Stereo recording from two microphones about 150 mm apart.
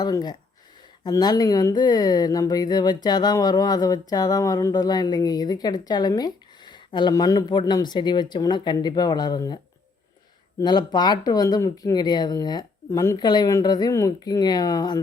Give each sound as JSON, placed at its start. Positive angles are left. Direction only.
{"t": 0.0, "sound": "speech", "side_deg": 25}
{"t": 10.6, "sound": "speech", "side_deg": 30}